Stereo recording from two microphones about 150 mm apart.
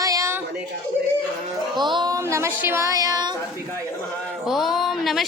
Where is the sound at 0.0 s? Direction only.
20° right (ahead or behind).